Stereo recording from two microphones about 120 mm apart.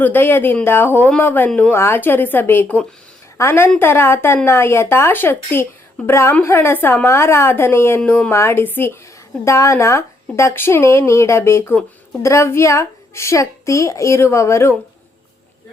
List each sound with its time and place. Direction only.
0.0 s speech: 15° left (ahead or behind)
1.7 s a woman's voice: 20° left (ahead or behind)